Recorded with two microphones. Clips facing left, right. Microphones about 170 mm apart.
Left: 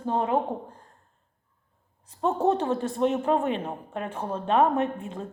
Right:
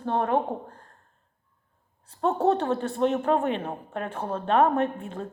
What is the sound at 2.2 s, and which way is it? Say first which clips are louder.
Speech: right 1 dB; 15° left (ahead or behind).